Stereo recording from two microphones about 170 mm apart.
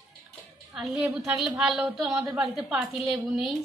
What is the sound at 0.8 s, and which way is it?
A woman's voice, 5° right (ahead or behind).